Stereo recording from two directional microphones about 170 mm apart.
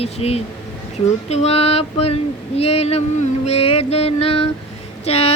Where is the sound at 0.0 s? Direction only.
35° left (ahead or behind).